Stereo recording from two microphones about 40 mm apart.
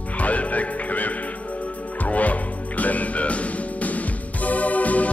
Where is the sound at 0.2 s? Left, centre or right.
Left.